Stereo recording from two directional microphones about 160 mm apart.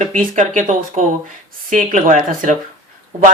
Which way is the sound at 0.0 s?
55° right (ahead or behind).